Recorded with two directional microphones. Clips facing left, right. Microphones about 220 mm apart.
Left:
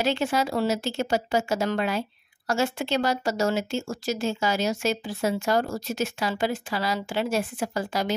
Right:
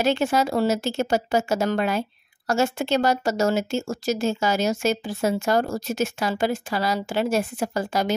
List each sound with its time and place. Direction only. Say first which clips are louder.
0.0 s speech: right 3 dB; 45° right (ahead or behind)